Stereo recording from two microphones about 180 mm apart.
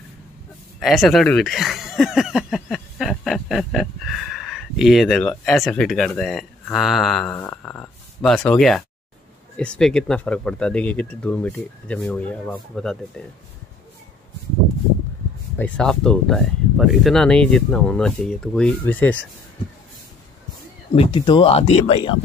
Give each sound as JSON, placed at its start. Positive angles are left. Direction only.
{"t": 0.7, "sound": "speech", "side_deg": 0}
{"t": 15.5, "sound": "speech", "side_deg": 10}
{"t": 20.9, "sound": "speech", "side_deg": 30}